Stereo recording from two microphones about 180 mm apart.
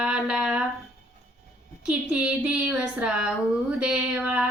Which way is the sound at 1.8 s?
5° right (ahead or behind).